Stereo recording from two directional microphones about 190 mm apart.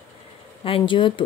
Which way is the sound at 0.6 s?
25° left (ahead or behind).